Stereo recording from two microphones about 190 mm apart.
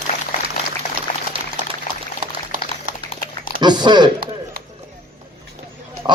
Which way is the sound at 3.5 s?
25° right (ahead or behind).